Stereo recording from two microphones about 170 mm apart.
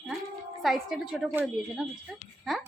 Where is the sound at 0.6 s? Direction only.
Centre (ahead or behind).